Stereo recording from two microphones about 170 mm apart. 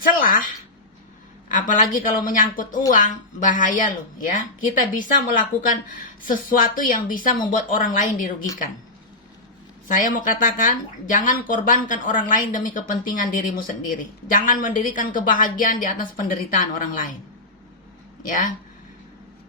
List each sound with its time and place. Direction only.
0.2 s a woman's voice: 55° left (ahead or behind)
1.5 s speech: 50° left (ahead or behind)
6.2 s speech: 55° left (ahead or behind)
9.8 s speech: 50° left (ahead or behind)
18.3 s speech: 50° left (ahead or behind)